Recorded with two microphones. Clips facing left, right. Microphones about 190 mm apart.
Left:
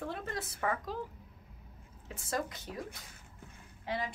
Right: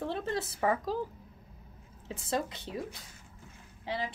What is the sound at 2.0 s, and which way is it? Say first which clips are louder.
Speech: right 3 dB; 25° right (ahead or behind).